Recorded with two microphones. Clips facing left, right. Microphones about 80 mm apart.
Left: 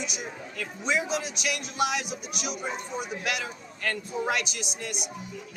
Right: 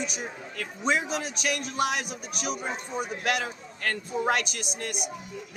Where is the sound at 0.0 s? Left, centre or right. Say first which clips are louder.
Right 1 dB; right.